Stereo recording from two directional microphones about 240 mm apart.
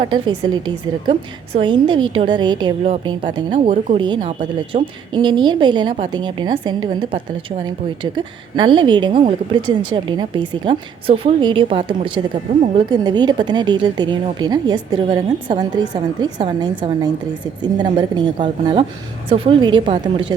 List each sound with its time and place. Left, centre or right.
0.0 s a woman's voice: centre